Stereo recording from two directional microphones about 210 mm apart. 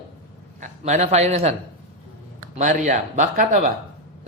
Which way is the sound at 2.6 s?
35° right (ahead or behind).